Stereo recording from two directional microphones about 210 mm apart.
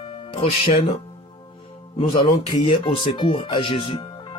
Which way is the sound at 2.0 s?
25° left (ahead or behind).